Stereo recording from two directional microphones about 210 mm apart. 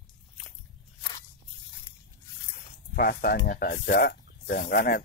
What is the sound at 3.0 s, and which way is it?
Speech, 45° left (ahead or behind).